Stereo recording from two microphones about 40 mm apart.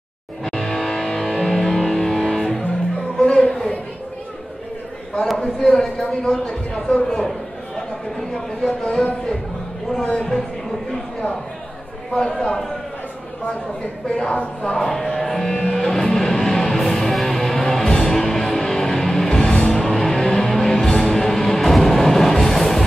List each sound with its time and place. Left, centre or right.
0.4 s music: centre
3.2 s music: left
5.4 s a woman's voice: centre
8.6 s a woman's voice: left
12.1 s speech: centre
14.0 s a woman's voice: centre
15.5 s music: centre